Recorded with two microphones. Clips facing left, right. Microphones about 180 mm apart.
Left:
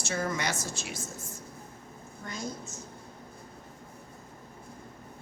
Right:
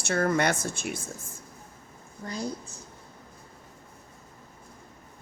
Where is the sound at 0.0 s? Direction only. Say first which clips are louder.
Right 7 dB; 60° right (ahead or behind).